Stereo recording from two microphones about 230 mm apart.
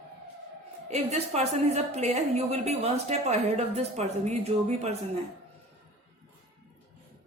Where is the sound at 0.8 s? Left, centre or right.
Right.